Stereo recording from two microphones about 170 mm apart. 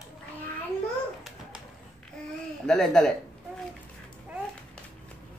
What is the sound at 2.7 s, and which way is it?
Speech, 5° left (ahead or behind).